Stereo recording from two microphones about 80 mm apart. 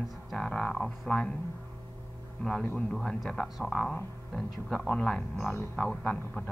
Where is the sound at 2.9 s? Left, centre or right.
Centre.